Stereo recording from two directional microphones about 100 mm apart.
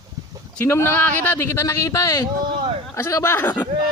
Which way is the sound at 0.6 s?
25° left (ahead or behind).